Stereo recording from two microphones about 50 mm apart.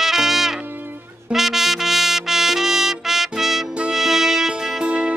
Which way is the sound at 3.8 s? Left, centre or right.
Centre.